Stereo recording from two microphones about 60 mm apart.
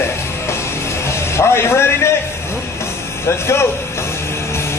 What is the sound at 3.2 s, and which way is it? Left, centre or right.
Speech, left.